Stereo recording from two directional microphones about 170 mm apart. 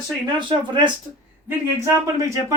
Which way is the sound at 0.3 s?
30° right (ahead or behind).